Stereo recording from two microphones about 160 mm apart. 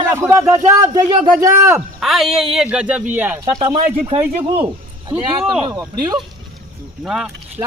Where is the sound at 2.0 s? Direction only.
Centre (ahead or behind).